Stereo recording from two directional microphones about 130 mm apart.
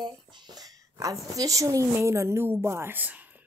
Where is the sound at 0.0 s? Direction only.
35° right (ahead or behind).